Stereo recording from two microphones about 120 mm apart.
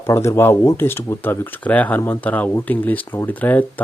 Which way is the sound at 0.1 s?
20° left (ahead or behind).